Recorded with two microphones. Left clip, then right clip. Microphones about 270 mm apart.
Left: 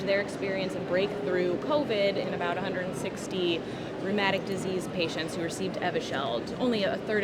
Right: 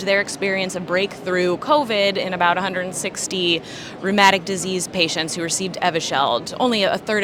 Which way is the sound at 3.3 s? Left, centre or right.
Right.